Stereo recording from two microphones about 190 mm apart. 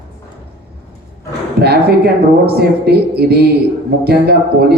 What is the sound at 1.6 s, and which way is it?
A man's voice, 55° right (ahead or behind).